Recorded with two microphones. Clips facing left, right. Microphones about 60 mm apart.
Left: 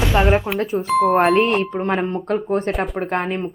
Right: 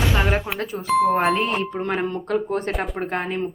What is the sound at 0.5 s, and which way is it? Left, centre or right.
Speech, left.